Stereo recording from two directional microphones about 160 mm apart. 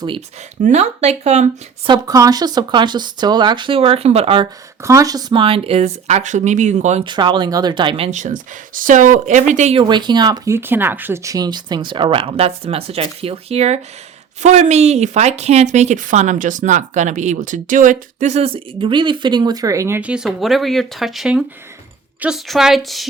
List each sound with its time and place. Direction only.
0.6 s speech: 45° right (ahead or behind)
1.9 s speech: 20° right (ahead or behind)
4.8 s speech: 20° right (ahead or behind); by 7.0 s 45° right (ahead or behind)
7.0 s speech: 30° right (ahead or behind)
8.1 s speech: 55° right (ahead or behind)
9.7 s speech: 30° right (ahead or behind)
20.0 s speech: 5° right (ahead or behind)